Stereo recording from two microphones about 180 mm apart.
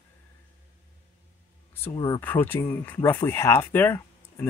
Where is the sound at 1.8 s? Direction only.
25° left (ahead or behind).